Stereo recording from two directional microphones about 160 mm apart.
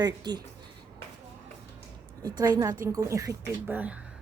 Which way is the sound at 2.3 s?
20° right (ahead or behind).